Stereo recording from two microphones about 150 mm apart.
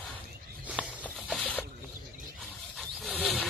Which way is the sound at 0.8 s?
5° left (ahead or behind).